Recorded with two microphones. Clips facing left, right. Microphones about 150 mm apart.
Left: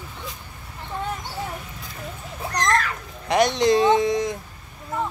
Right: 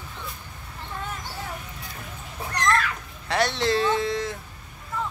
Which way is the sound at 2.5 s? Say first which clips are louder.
Left 1 dB; 40° left (ahead or behind).